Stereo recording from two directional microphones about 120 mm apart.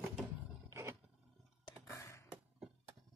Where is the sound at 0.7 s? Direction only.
25° right (ahead or behind).